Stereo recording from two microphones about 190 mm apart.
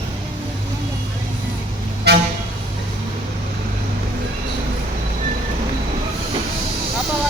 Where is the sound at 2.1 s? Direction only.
60° right (ahead or behind).